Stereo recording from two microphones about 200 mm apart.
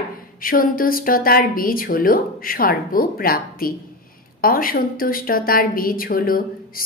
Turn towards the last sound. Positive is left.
turn(degrees=45)  # may be behind; listen again after turning